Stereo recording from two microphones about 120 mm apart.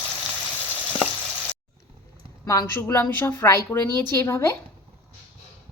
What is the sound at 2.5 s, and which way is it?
A woman's voice, 20° left (ahead or behind).